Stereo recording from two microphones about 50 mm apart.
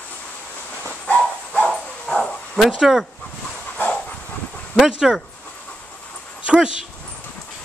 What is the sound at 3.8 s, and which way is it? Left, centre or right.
Dog, left.